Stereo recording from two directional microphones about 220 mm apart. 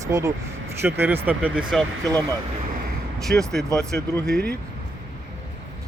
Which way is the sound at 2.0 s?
15° right (ahead or behind).